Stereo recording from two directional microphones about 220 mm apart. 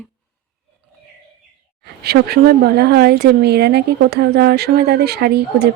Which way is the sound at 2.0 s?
45° right (ahead or behind).